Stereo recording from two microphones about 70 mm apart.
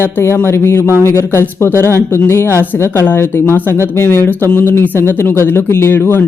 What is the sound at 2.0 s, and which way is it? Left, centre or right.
Speech, left.